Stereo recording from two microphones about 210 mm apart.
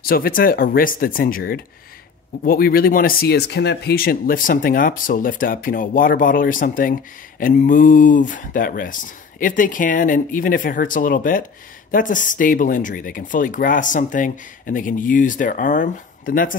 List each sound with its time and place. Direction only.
0.0 s speech: 45° left (ahead or behind)